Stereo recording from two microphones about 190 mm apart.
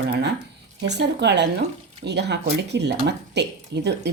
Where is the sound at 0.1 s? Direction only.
65° right (ahead or behind).